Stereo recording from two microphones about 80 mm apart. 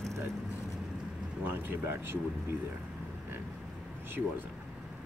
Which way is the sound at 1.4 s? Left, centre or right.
Right.